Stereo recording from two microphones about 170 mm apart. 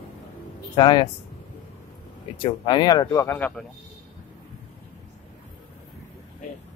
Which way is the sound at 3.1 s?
10° left (ahead or behind).